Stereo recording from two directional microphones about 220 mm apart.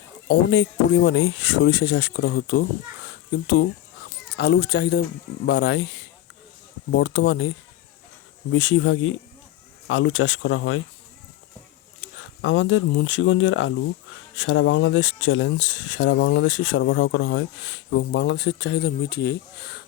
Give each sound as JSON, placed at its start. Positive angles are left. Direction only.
{"t": 0.3, "sound": "speech", "side_deg": 55}
{"t": 3.1, "sound": "a sound", "side_deg": 45}
{"t": 4.4, "sound": "speech", "side_deg": 50}
{"t": 8.5, "sound": "speech", "side_deg": 60}
{"t": 11.9, "sound": "speech", "side_deg": 60}